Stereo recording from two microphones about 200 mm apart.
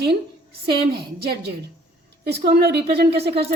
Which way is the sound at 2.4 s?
50° right (ahead or behind).